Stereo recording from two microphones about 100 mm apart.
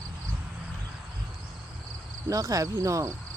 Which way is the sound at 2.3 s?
35° right (ahead or behind).